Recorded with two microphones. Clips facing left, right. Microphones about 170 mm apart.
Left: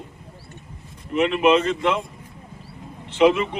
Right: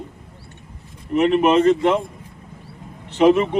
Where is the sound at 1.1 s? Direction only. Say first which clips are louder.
Right 2 dB; 40° right (ahead or behind).